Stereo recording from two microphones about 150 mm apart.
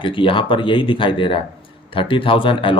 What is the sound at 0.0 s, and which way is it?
Speech, 35° left (ahead or behind).